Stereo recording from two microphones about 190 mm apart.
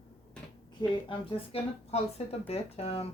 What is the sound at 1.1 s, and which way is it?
Speech, 30° left (ahead or behind).